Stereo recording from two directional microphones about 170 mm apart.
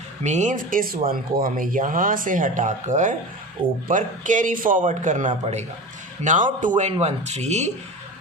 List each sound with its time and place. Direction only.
0.2 s speech: 45° right (ahead or behind)